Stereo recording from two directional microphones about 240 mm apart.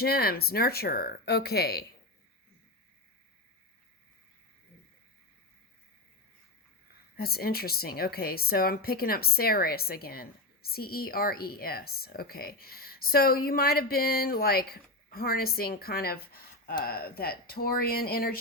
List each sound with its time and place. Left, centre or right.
0.0 s a woman's voice: left
7.2 s a woman's voice: left